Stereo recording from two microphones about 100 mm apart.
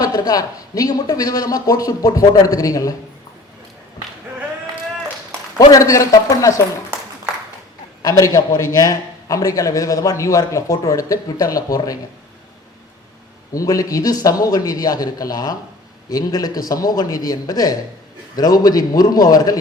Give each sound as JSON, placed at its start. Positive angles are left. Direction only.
{"t": 0.0, "sound": "a man's voice", "side_deg": 40}
{"t": 5.5, "sound": "a man's voice", "side_deg": 35}
{"t": 8.0, "sound": "a man's voice", "side_deg": 35}
{"t": 13.5, "sound": "a man's voice", "side_deg": 35}